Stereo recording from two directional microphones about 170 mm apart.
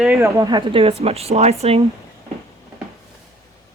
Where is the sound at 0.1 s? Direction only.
15° right (ahead or behind); by 1.8 s 35° right (ahead or behind).